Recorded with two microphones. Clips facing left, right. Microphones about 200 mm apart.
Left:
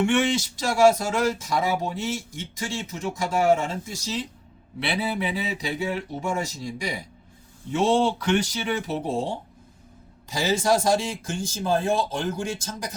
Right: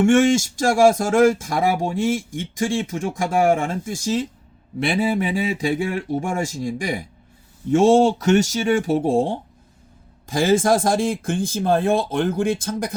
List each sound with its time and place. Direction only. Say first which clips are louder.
0.0 s speech: right 7 dB; 45° right (ahead or behind)